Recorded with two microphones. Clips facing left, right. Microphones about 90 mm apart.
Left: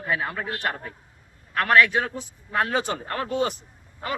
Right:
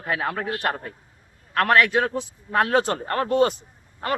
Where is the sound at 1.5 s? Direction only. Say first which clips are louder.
Right 1 dB; 55° right (ahead or behind).